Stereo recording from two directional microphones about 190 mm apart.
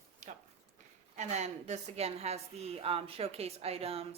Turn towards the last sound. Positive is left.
turn(degrees=-30)  # may be behind; listen again after turning